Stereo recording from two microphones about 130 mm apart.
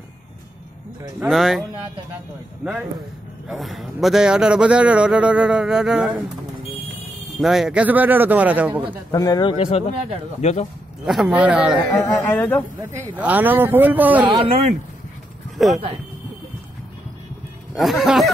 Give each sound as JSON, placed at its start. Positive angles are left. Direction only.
{"t": 1.2, "sound": "a man's voice", "side_deg": 0}
{"t": 7.3, "sound": "a man's voice", "side_deg": -5}
{"t": 9.1, "sound": "speech", "side_deg": 30}
{"t": 9.6, "sound": "speech", "side_deg": 50}
{"t": 10.4, "sound": "speech", "side_deg": 60}
{"t": 11.1, "sound": "a man's voice", "side_deg": 0}
{"t": 12.0, "sound": "speech", "side_deg": 15}
{"t": 13.1, "sound": "a man's voice", "side_deg": -10}
{"t": 14.2, "sound": "a woman's voice", "side_deg": -40}
{"t": 15.5, "sound": "speech", "side_deg": 0}
{"t": 17.7, "sound": "a man's voice", "side_deg": 0}